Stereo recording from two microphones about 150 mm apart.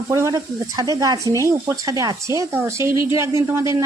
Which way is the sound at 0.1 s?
20° right (ahead or behind).